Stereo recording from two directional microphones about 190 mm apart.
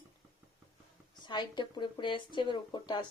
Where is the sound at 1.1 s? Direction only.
25° left (ahead or behind).